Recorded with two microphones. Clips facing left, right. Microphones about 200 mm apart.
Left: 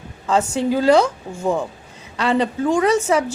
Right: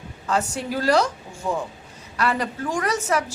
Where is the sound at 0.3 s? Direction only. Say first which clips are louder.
Left 6 dB; 25° left (ahead or behind).